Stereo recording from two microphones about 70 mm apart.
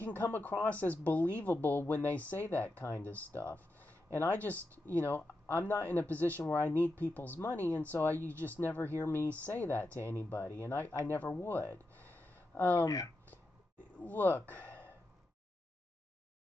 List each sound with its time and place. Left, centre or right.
0.0 s speech: left
11.3 s a sound: left
12.8 s speech: left
14.0 s speech: left